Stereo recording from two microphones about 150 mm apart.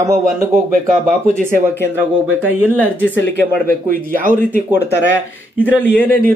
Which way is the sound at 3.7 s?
70° right (ahead or behind).